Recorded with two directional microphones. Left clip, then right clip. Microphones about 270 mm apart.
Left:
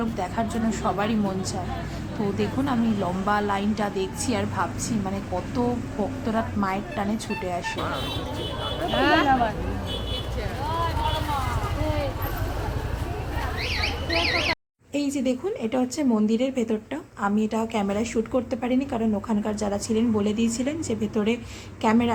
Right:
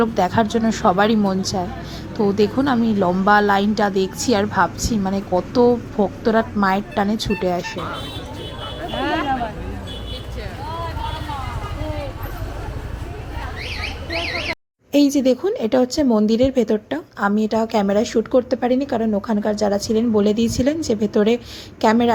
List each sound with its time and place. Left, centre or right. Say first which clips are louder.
0.0 s a woman's voice: right 10 dB; right
14.9 s a woman's voice: right 10 dB; right